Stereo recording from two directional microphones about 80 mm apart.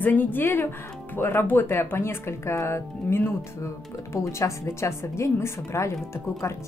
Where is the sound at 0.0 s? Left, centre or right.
Left.